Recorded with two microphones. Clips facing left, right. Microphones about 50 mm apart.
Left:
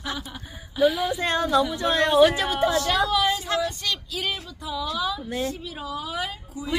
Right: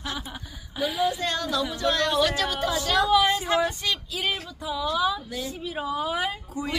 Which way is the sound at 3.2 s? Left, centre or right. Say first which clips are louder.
Right 1 dB; right.